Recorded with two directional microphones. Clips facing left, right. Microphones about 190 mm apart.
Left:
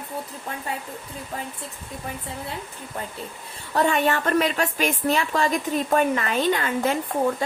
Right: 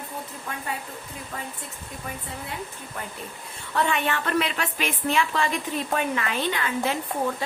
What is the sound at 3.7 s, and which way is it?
A woman's voice, 40° left (ahead or behind).